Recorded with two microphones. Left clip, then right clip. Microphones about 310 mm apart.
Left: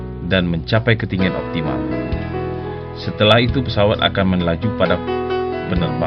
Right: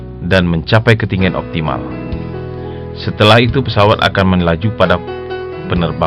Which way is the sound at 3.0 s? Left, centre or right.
Right.